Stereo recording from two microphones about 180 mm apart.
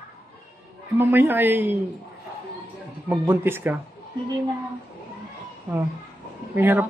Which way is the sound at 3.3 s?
10° right (ahead or behind).